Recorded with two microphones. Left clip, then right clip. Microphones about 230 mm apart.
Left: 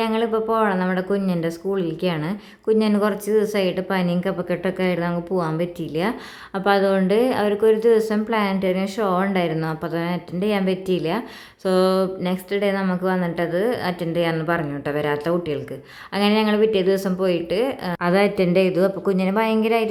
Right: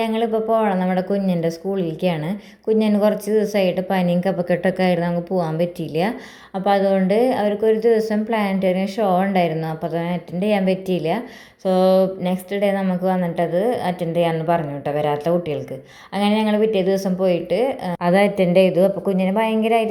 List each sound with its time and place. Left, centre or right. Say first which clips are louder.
0.0 s a woman's voice: right 1 dB; centre
10.7 s a woman's voice: right 2 dB; left
11.6 s speech: right 3 dB; centre